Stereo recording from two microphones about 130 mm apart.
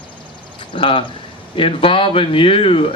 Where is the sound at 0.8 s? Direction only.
45° left (ahead or behind).